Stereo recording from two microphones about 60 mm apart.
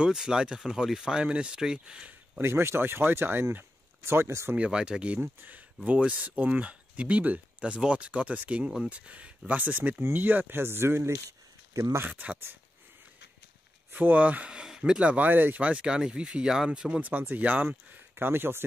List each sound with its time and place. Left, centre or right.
0.0 s speech: centre
2.4 s speech: right
4.0 s speech: right
4.6 s speech: centre
5.2 s speech: right
12.0 s speech: right
13.9 s speech: right
15.2 s speech: right
15.6 s speech: centre
17.4 s speech: right
17.6 s speech: right